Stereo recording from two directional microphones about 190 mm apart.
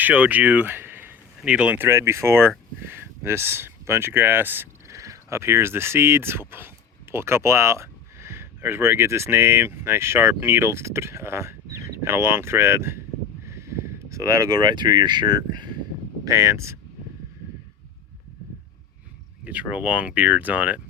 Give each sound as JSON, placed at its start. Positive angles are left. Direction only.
{"t": 0.0, "sound": "speech", "side_deg": -10}
{"t": 19.5, "sound": "speech", "side_deg": -5}